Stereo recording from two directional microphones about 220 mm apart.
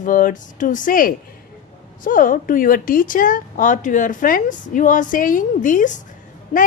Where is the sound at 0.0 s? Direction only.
35° left (ahead or behind).